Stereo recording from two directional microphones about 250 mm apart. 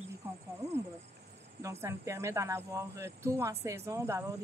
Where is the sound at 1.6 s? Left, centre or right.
Centre.